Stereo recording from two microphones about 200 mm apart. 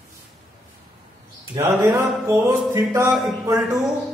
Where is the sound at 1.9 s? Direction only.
15° right (ahead or behind).